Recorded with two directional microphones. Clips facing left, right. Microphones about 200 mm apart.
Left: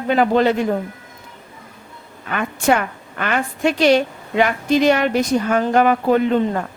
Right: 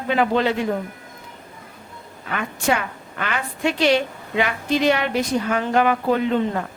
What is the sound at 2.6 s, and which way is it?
A woman's voice, 50° left (ahead or behind).